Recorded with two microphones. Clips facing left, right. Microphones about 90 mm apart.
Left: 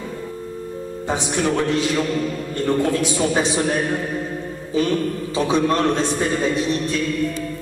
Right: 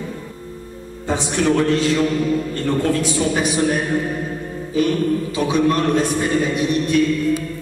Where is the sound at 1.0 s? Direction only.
20° left (ahead or behind).